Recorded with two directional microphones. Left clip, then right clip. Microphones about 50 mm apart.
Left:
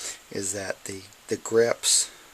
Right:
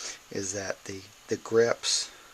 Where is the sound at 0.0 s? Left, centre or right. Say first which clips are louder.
Left 2 dB; left.